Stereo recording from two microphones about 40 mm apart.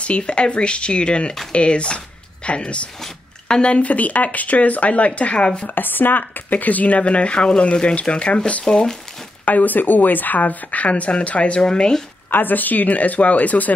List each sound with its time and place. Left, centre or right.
0.0 s speech: left
5.8 s speech: left
7.0 s speech: left
8.6 s speech: centre
9.4 s speech: left
11.6 s speech: centre
12.3 s speech: left